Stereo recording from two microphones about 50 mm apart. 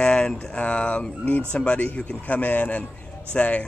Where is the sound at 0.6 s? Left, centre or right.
Left.